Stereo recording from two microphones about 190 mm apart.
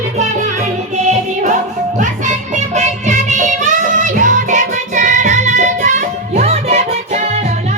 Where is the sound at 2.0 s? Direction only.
40° right (ahead or behind).